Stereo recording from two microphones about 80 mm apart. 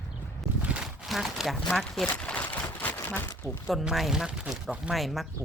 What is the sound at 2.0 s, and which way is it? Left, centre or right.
Speech, centre.